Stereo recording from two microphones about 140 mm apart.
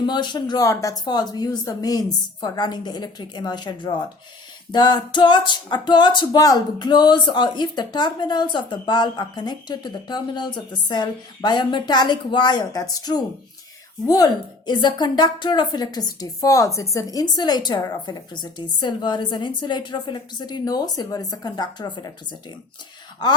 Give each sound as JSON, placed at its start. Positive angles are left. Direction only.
{"t": 0.0, "sound": "music", "side_deg": 35}
{"t": 14.7, "sound": "music", "side_deg": 30}